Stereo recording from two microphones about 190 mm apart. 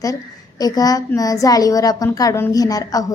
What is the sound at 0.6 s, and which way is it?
A woman's voice, 20° left (ahead or behind).